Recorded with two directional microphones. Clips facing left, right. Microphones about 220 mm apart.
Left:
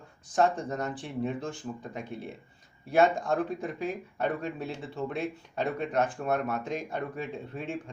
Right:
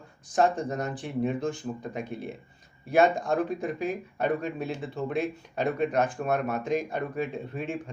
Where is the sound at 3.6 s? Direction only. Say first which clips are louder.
Right 3 dB; 15° right (ahead or behind).